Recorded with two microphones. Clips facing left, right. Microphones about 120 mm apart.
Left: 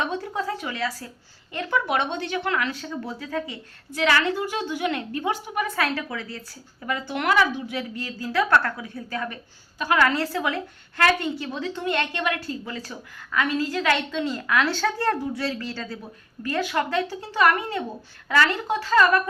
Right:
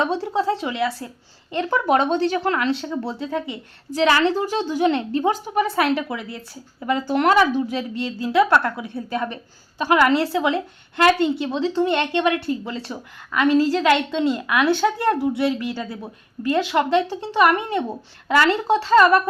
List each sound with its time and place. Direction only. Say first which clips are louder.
0.0 s speech: right 6 dB; 30° right (ahead or behind)
1.7 s speech: right 6 dB; 35° right (ahead or behind)